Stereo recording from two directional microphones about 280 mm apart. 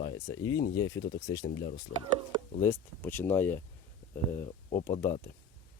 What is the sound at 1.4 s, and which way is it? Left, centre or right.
Speech, left.